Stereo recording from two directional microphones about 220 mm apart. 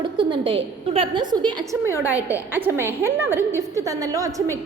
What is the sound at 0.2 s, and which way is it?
A woman's voice, 20° right (ahead or behind).